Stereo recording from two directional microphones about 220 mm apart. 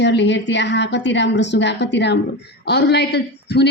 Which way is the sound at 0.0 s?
55° left (ahead or behind).